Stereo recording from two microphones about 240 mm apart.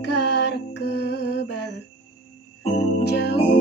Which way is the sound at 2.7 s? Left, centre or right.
Left.